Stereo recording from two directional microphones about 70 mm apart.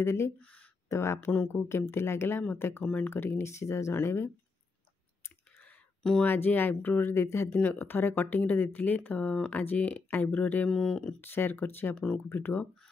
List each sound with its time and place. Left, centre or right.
0.0 s speech: left
0.4 s speech: centre
0.8 s speech: left
2.8 s speech: left
3.1 s speech: left
6.2 s speech: left
10.7 s speech: centre
11.1 s speech: left
11.9 s speech: centre
12.3 s speech: left